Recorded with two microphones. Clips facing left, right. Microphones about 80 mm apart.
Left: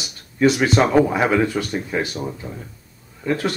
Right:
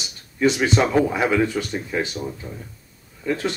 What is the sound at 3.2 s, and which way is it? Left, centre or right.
Speech, centre.